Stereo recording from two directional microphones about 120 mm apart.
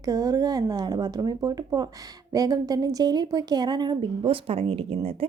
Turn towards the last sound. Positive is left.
turn(degrees=-55)  # may be behind; listen again after turning